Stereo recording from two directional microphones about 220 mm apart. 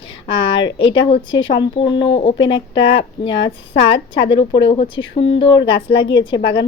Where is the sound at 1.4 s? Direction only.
60° left (ahead or behind).